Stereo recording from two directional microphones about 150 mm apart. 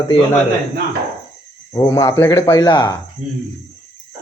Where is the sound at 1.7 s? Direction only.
25° left (ahead or behind).